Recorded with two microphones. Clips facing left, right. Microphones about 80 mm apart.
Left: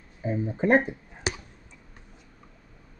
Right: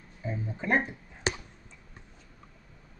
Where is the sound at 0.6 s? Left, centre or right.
Left.